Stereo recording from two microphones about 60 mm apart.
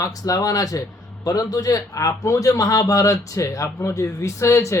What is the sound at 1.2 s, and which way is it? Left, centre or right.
A man's voice, left.